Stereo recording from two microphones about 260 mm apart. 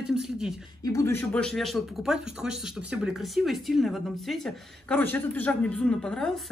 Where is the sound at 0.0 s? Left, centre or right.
Centre.